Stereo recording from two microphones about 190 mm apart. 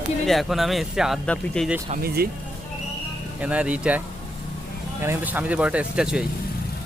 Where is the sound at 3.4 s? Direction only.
5° right (ahead or behind).